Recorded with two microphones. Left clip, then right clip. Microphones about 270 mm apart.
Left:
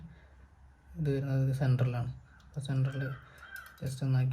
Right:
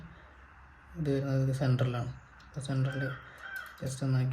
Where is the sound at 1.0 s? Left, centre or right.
Left.